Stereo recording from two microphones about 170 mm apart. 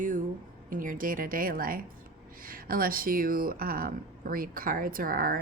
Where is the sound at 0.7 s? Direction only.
55° right (ahead or behind).